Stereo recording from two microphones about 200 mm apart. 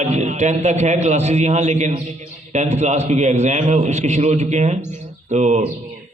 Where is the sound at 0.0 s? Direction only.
35° right (ahead or behind).